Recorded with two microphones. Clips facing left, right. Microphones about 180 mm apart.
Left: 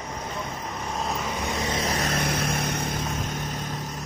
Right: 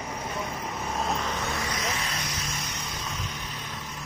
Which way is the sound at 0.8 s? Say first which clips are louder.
Even; centre (ahead or behind).